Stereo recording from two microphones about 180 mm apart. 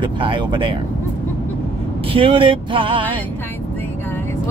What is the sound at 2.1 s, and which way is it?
Music, 30° right (ahead or behind).